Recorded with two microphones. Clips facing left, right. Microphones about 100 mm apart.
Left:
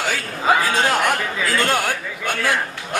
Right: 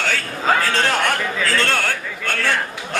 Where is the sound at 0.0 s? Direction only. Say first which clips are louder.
Even; 10° left (ahead or behind).